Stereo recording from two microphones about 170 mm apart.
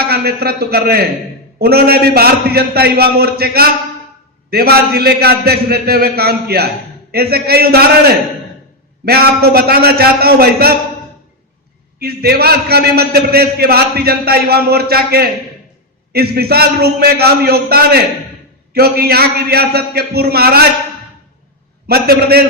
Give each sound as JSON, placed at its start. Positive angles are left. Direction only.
{"t": 0.1, "sound": "a man's voice", "side_deg": -65}
{"t": 11.9, "sound": "a man's voice", "side_deg": -65}
{"t": 21.8, "sound": "a man's voice", "side_deg": -65}